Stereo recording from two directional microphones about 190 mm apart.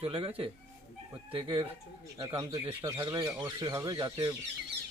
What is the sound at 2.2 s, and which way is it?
Speech, 15° right (ahead or behind).